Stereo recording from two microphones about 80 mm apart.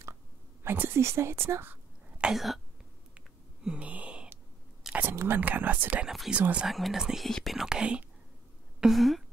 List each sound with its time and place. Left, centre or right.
0.7 s a woman's voice: right
2.3 s speech: centre
3.2 s a sound: centre
5.1 s speech: right
6.0 s speech: centre
6.3 s speech: centre
6.7 s speech: centre
8.8 s a sound: centre